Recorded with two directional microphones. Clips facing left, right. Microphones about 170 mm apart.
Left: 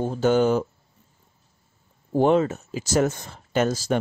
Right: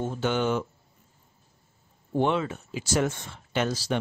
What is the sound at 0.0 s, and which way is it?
Speech, 40° left (ahead or behind).